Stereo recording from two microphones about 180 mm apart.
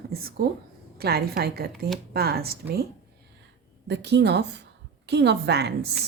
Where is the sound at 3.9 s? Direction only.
70° right (ahead or behind).